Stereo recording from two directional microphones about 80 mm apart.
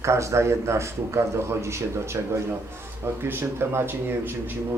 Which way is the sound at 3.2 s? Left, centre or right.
Right.